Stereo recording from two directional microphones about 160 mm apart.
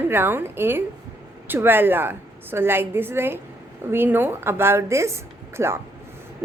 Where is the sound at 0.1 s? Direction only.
15° right (ahead or behind).